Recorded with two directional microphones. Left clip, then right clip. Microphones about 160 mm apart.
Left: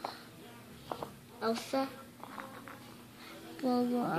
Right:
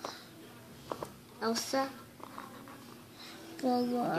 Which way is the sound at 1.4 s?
35° right (ahead or behind).